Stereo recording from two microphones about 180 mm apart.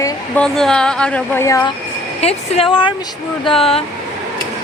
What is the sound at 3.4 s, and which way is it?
Speech, 30° left (ahead or behind).